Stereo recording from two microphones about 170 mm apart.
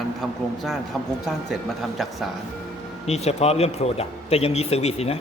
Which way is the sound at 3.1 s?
40° left (ahead or behind).